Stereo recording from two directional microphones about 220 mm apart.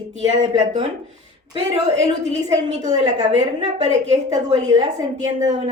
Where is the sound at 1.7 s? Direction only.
30° right (ahead or behind).